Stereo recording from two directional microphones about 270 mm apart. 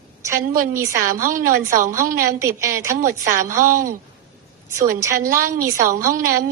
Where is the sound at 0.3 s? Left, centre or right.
Right.